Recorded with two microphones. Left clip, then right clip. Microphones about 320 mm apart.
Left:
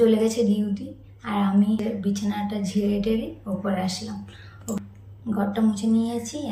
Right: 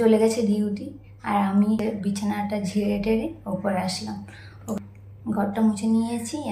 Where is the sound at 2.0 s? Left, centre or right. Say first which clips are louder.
Even; centre.